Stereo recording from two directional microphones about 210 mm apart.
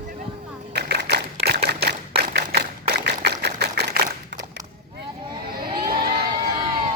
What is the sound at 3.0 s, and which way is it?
Typewriter, 50° right (ahead or behind).